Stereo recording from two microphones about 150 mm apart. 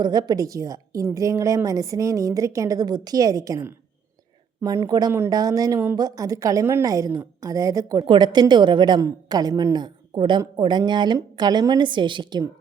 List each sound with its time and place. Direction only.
0.0 s a woman's voice: 25° right (ahead or behind)